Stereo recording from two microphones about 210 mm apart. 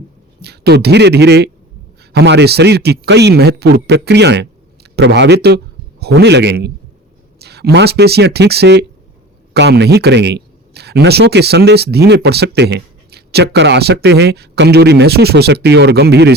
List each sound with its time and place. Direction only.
0.4 s a man's voice: 50° right (ahead or behind)